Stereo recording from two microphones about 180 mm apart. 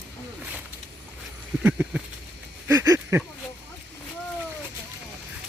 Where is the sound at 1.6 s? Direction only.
10° right (ahead or behind).